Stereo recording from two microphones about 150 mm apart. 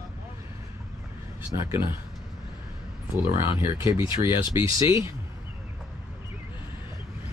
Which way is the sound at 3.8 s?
15° right (ahead or behind).